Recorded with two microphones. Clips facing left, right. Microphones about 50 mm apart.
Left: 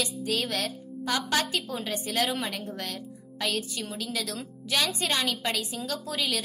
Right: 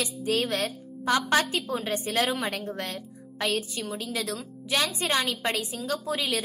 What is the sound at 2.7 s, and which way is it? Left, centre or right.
A woman's voice, right.